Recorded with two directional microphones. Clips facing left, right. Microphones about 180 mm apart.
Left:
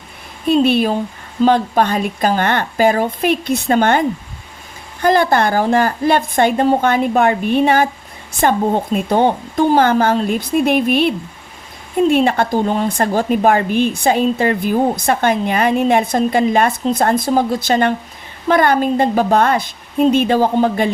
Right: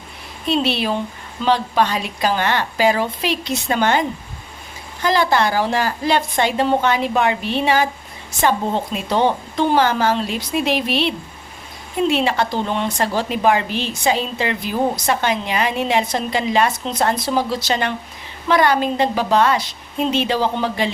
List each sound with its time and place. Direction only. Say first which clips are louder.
0.4 s a woman's voice: left 6 dB; 50° left (ahead or behind)
5.0 s a woman's voice: left 4 dB; 50° left (ahead or behind)